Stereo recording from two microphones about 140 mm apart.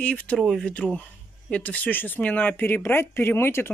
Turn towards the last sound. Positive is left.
turn(degrees=15)  # may be behind; listen again after turning